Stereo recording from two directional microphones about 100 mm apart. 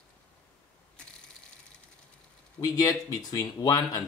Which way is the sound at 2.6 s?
40° left (ahead or behind).